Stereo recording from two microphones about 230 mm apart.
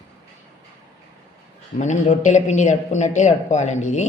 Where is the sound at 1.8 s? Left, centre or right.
Left.